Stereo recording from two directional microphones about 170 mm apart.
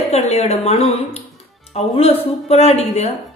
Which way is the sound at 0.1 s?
40° left (ahead or behind).